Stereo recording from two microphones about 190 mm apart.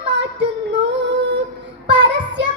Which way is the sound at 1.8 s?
65° right (ahead or behind).